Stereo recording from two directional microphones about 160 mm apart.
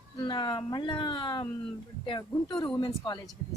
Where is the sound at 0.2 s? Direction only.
30° left (ahead or behind).